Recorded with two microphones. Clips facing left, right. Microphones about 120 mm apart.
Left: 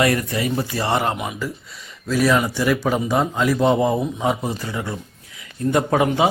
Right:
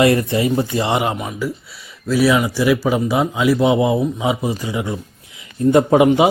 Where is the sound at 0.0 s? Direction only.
25° right (ahead or behind).